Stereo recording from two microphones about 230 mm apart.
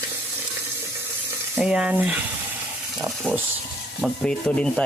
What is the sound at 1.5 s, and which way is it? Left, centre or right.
Speech, centre.